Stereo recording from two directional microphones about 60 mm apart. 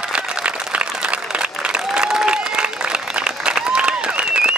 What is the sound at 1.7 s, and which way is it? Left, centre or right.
Applause, centre.